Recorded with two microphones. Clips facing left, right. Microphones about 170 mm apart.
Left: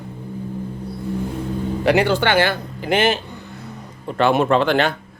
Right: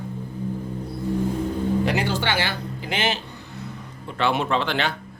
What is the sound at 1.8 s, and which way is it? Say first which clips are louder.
Speech: left 7 dB; 65° left (ahead or behind).